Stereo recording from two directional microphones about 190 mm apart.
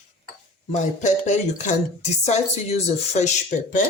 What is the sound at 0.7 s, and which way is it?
A woman's voice, 40° left (ahead or behind).